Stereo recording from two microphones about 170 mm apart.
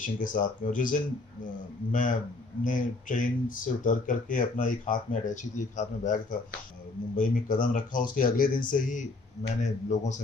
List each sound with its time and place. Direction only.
0.0 s speech: 50° left (ahead or behind)
7.2 s speech: 50° left (ahead or behind)